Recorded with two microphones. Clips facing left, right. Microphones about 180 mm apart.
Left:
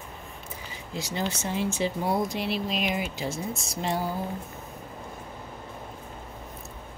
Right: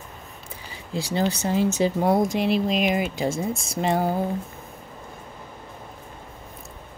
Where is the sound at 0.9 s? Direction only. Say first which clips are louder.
Right 7 dB; 30° right (ahead or behind); by 3.7 s 50° right (ahead or behind).